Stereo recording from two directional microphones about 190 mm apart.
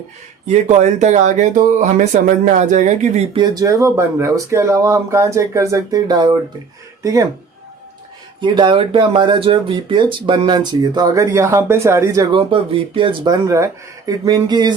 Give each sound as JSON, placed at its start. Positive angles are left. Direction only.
{"t": 0.4, "sound": "speech", "side_deg": -35}
{"t": 3.3, "sound": "speech", "side_deg": -20}
{"t": 8.4, "sound": "speech", "side_deg": -25}
{"t": 12.3, "sound": "speech", "side_deg": -25}